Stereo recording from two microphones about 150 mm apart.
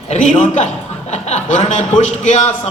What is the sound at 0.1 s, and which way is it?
A man's voice, 50° left (ahead or behind).